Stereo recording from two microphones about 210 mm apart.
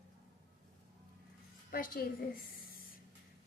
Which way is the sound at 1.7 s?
40° left (ahead or behind).